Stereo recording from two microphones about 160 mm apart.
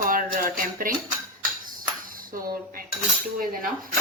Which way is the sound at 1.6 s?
60° right (ahead or behind).